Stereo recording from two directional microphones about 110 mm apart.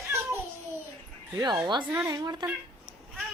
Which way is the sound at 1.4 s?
40° right (ahead or behind).